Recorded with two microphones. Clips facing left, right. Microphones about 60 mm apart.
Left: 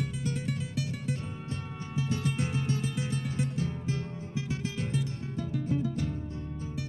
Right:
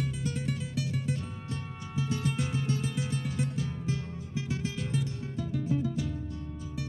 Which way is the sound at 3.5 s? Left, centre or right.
Left.